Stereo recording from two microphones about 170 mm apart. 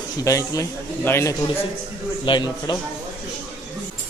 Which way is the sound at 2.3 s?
25° left (ahead or behind).